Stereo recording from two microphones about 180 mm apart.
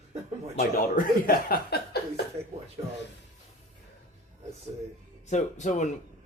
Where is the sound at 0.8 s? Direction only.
50° left (ahead or behind).